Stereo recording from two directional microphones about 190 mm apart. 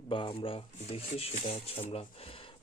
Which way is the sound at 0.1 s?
30° left (ahead or behind).